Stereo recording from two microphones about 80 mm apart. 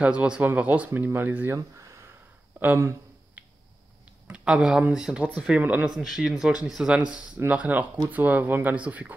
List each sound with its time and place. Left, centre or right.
0.0 s speech: centre
1.8 s a sound: right
2.6 s speech: right
3.4 s finger snapping: centre
4.3 s speech: centre
5.9 s speech: centre